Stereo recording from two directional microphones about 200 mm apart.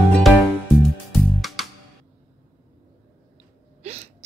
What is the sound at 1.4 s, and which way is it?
Music, centre (ahead or behind).